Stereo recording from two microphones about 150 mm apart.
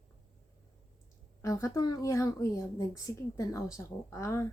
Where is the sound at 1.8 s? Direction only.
25° left (ahead or behind).